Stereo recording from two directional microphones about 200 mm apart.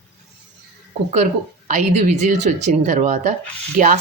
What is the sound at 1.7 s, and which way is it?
Speech, 40° right (ahead or behind).